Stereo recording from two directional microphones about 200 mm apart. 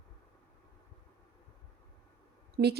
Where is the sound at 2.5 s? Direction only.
55° right (ahead or behind).